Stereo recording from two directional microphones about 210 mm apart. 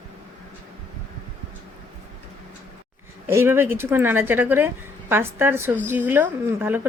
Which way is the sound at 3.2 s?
10° right (ahead or behind).